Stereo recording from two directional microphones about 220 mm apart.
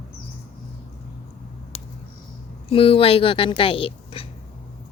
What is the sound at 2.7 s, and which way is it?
Speech, 25° left (ahead or behind).